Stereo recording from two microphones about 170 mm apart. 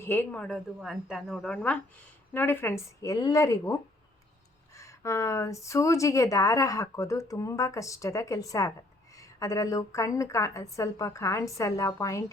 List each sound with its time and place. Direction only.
0.0 s a woman's voice: 15° left (ahead or behind)